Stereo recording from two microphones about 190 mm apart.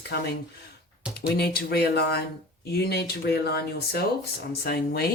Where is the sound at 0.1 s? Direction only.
55° left (ahead or behind).